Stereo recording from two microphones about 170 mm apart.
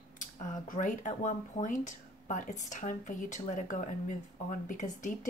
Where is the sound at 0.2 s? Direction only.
50° left (ahead or behind).